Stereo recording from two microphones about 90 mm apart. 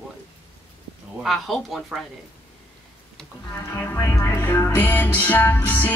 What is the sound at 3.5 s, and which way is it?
Music, 25° left (ahead or behind).